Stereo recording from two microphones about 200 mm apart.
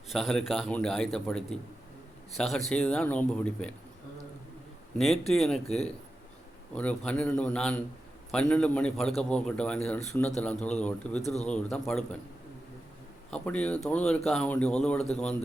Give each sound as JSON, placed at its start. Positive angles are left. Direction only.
{"t": 0.1, "sound": "a man's voice", "side_deg": 0}
{"t": 5.2, "sound": "a man's voice", "side_deg": 0}
{"t": 6.7, "sound": "a man's voice", "side_deg": 5}
{"t": 13.3, "sound": "a man's voice", "side_deg": 5}